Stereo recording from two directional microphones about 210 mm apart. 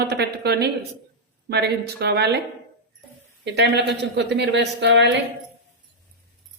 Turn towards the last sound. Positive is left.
turn(degrees=-55)  # may be behind; listen again after turning